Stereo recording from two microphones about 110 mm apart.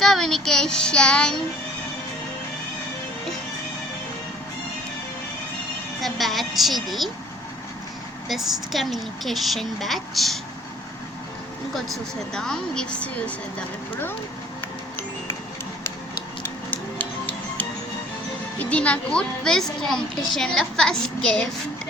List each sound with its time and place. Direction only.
0.0 s speech: 5° left (ahead or behind)
6.0 s a woman's voice: centre (ahead or behind)
8.3 s a woman's voice: centre (ahead or behind)
12.3 s a woman's voice: 5° left (ahead or behind)
16.7 s music: 15° left (ahead or behind)
18.6 s a woman's voice: 10° left (ahead or behind)